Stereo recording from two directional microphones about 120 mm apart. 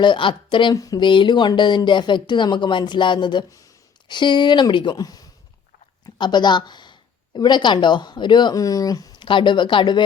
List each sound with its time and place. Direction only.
0.0 s a woman's voice: 45° left (ahead or behind)
9.2 s speech: 45° left (ahead or behind)